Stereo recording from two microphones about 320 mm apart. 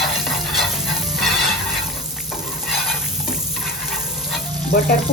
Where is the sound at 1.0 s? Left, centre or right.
Centre.